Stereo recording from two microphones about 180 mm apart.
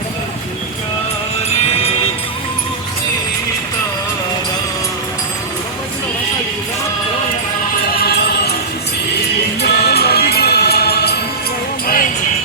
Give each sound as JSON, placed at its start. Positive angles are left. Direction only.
{"t": 9.6, "sound": "music", "side_deg": 60}